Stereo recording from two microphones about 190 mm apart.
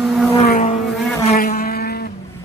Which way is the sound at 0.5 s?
40° left (ahead or behind).